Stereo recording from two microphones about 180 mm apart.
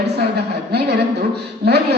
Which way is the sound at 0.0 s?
65° right (ahead or behind).